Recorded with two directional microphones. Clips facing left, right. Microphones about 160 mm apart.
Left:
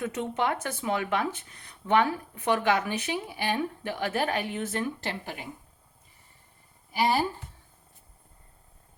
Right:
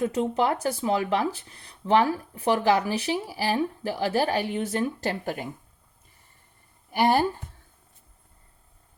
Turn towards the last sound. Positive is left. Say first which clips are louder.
# right 4 dB
turn(degrees=-55)  # may be behind; listen again after turning